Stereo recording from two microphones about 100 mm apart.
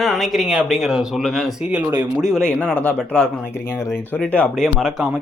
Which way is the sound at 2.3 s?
5° left (ahead or behind).